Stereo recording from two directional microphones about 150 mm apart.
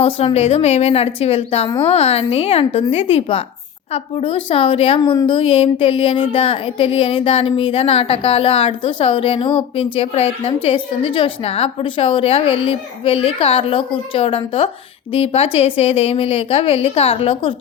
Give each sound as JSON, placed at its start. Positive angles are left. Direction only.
{"t": 0.0, "sound": "a woman's voice", "side_deg": 40}